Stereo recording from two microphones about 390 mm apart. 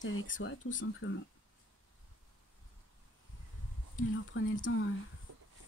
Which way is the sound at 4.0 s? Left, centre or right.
Left.